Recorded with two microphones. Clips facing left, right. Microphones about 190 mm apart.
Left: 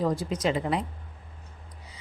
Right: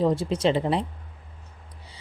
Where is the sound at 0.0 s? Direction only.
25° right (ahead or behind).